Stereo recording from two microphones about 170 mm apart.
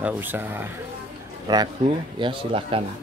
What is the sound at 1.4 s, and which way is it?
Speech, 25° right (ahead or behind).